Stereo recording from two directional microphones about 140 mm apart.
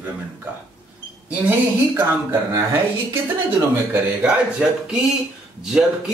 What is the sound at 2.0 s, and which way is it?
Speech, 15° right (ahead or behind).